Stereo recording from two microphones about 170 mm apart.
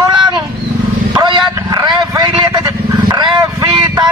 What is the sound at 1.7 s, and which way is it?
Vehicle, 25° right (ahead or behind).